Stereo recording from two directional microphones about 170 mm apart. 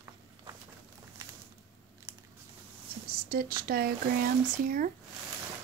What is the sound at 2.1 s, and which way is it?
Biting, 15° right (ahead or behind).